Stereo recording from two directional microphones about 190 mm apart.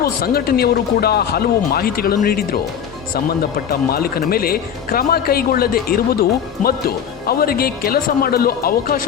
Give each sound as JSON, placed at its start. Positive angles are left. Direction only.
{"t": 0.0, "sound": "speech", "side_deg": 55}